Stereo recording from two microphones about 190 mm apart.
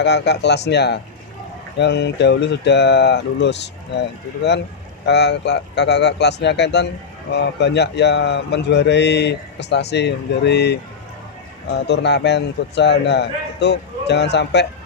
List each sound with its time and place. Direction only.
0.0 s speech: 65° left (ahead or behind)
5.0 s speech: 65° left (ahead or behind)